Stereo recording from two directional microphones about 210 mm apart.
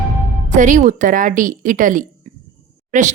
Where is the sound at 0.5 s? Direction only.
35° right (ahead or behind).